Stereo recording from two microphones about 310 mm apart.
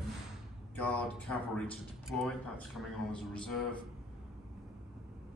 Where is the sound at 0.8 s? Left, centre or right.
Centre.